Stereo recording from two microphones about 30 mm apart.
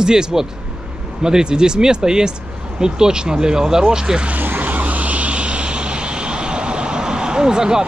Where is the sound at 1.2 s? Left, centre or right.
Right.